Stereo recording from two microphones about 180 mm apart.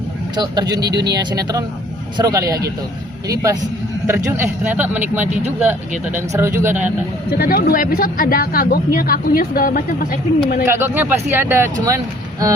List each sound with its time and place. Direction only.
0.3 s speech: 20° right (ahead or behind)
4.0 s speech: 10° right (ahead or behind)
5.2 s speech: 40° right (ahead or behind)
6.1 s speech: 15° right (ahead or behind)
7.3 s speech: 55° left (ahead or behind)
10.7 s speech: 10° right (ahead or behind)